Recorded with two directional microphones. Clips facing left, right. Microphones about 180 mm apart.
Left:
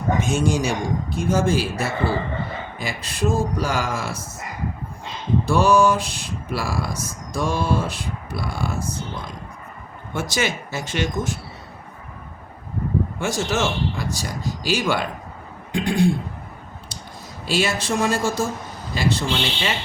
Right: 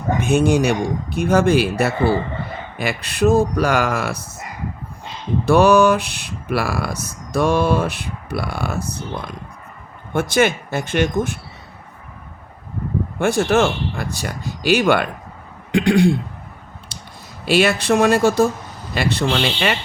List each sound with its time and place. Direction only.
0.2 s speech: 60° right (ahead or behind)
5.5 s speech: 65° right (ahead or behind)
13.1 s speech: 60° right (ahead or behind)
15.7 s speech: 75° right (ahead or behind)
16.9 s a sound: 70° right (ahead or behind)
17.4 s speech: 65° right (ahead or behind)